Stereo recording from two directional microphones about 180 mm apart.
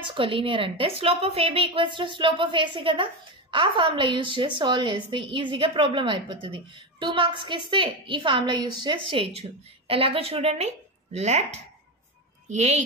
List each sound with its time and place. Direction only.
0.0 s a woman's voice: 30° right (ahead or behind)